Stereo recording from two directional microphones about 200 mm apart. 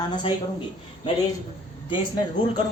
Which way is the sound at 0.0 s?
25° left (ahead or behind).